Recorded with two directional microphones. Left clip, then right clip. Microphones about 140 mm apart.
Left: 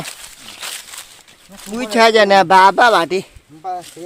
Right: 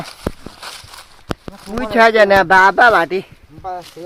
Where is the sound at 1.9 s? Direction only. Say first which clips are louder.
Even; 35° left (ahead or behind).